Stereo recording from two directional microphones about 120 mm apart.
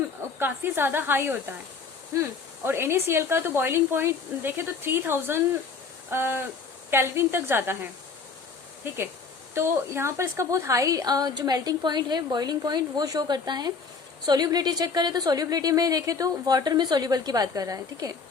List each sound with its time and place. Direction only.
0.3 s a woman's voice: 20° right (ahead or behind)